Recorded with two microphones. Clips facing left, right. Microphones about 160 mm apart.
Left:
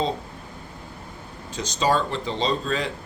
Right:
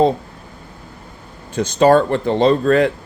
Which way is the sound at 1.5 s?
55° right (ahead or behind).